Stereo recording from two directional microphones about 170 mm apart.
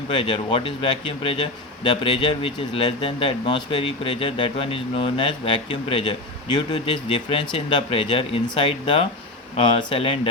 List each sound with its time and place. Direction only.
0.1 s speech: 30° left (ahead or behind)